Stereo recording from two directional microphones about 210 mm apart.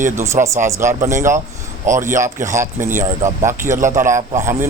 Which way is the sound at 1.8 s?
35° right (ahead or behind).